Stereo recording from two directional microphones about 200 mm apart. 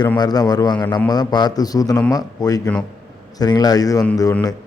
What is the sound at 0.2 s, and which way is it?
A man's voice, 20° left (ahead or behind).